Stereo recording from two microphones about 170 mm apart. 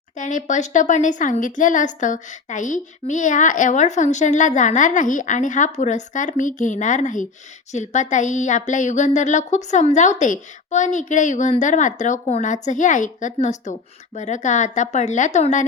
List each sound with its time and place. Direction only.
0.2 s a woman's voice: 45° left (ahead or behind)